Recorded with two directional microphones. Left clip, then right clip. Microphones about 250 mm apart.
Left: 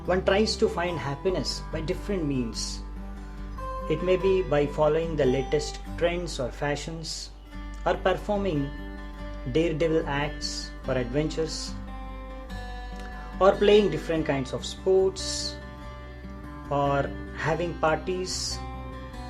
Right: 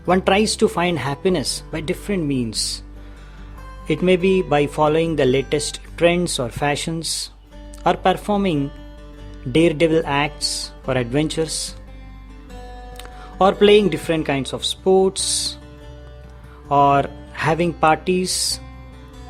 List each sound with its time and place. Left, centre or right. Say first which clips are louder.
0.1 s speech: right 7 dB; right
3.8 s speech: right 7 dB; right
13.0 s speech: right 6 dB; right
16.6 s speech: right 11 dB; right